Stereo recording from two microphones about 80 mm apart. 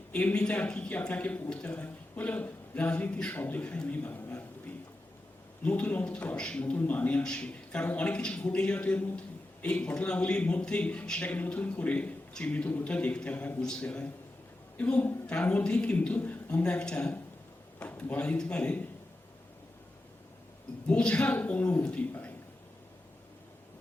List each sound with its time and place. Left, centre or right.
0.1 s a man's voice: centre
5.6 s a man's voice: centre
20.8 s a man's voice: centre